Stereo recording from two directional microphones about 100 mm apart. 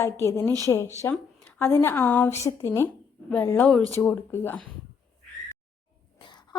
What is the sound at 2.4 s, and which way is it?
A woman's voice, 30° left (ahead or behind).